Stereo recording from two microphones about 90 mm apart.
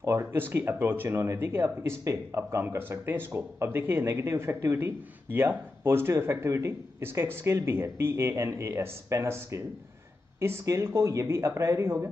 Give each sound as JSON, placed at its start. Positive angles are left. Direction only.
{"t": 0.0, "sound": "speech", "side_deg": -30}